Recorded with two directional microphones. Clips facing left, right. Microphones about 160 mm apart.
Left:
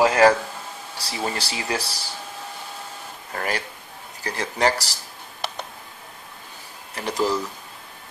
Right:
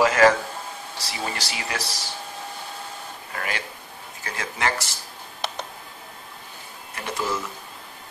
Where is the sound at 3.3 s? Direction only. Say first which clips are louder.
Left 4 dB; 40° left (ahead or behind).